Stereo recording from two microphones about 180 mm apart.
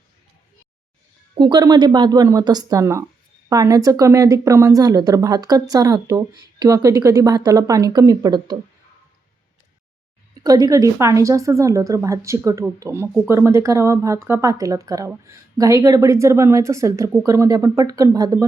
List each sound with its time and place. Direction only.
1.4 s speech: 25° right (ahead or behind)
10.4 s a woman's voice: 20° right (ahead or behind)